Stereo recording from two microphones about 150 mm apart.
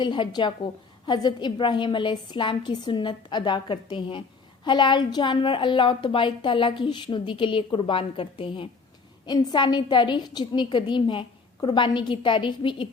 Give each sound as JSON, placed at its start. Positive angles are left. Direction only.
{"t": 0.0, "sound": "a woman's voice", "side_deg": 30}